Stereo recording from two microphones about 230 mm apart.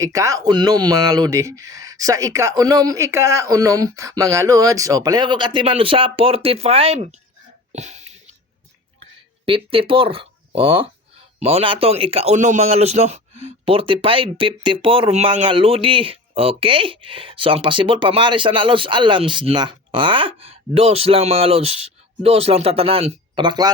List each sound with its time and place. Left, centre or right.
0.0 s speech: centre; by 8.0 s right
9.5 s a man's voice: right